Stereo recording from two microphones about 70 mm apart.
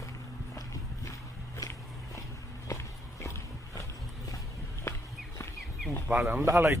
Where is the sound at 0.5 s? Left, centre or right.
Left.